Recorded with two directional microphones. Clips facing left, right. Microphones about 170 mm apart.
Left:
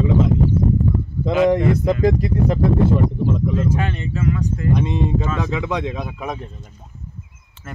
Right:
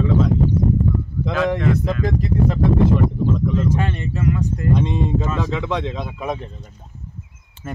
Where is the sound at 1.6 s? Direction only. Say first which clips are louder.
Left 2 dB; 15° left (ahead or behind).